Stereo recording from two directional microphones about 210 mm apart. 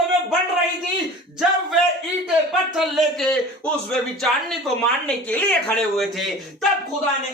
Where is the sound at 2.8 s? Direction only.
Centre (ahead or behind).